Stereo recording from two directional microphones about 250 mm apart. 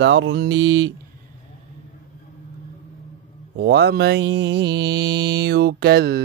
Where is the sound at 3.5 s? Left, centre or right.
Right.